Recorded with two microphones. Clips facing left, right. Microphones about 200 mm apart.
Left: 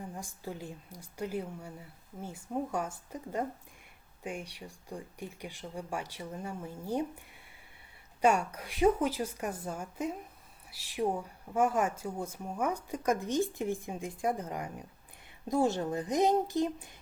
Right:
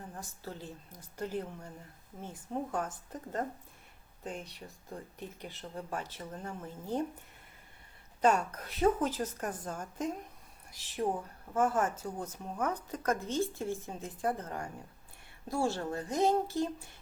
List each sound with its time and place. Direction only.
0.1 s a woman's voice: 10° left (ahead or behind)
8.2 s a woman's voice: 10° left (ahead or behind)